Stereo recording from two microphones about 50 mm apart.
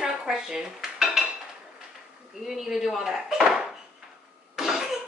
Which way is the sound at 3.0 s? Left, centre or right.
Centre.